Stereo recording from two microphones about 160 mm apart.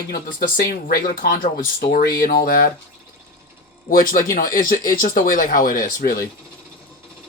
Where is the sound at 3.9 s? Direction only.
60° left (ahead or behind).